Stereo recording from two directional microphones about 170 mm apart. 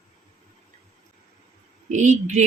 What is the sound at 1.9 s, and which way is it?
Speech, 45° right (ahead or behind).